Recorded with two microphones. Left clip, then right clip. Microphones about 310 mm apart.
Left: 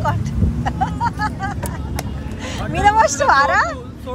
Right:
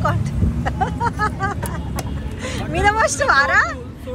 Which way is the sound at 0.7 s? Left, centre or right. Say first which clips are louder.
Left 1 dB; centre.